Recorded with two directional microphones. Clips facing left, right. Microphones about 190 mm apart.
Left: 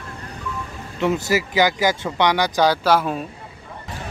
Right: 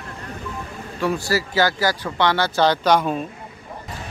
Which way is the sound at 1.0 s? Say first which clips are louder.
Left 2 dB; 20° left (ahead or behind).